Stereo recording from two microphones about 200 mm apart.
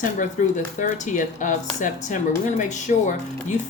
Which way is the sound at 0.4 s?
40° left (ahead or behind).